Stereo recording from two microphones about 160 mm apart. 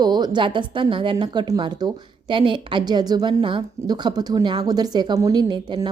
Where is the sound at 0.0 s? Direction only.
25° right (ahead or behind).